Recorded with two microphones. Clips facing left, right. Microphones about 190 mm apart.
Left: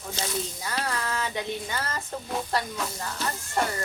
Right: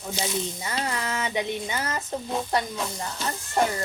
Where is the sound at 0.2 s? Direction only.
20° right (ahead or behind).